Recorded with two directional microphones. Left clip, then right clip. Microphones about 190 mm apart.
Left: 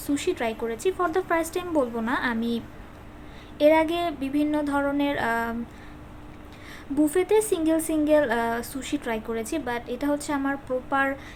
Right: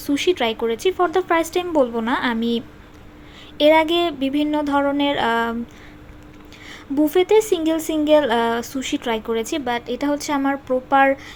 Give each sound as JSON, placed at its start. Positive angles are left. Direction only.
{"t": 0.0, "sound": "speech", "side_deg": -20}
{"t": 6.7, "sound": "speech", "side_deg": -20}